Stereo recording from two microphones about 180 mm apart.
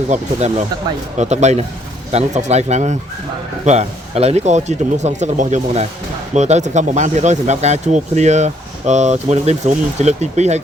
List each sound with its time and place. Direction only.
0.1 s speech: 35° right (ahead or behind)